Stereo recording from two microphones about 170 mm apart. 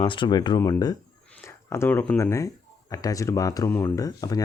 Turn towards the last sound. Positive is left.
turn(degrees=20)  # may be behind; listen again after turning